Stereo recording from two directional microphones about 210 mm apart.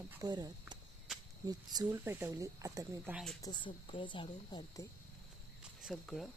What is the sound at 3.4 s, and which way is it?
Speech, 20° left (ahead or behind).